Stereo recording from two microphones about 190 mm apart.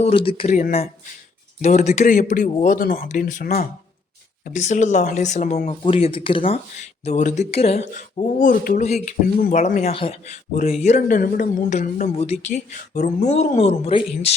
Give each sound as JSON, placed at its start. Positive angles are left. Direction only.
{"t": 0.0, "sound": "speech", "side_deg": 30}